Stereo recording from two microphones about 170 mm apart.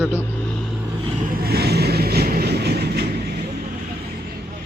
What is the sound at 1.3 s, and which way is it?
Train, 65° right (ahead or behind).